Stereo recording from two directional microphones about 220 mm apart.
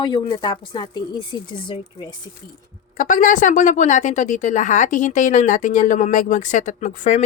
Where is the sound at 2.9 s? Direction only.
35° left (ahead or behind).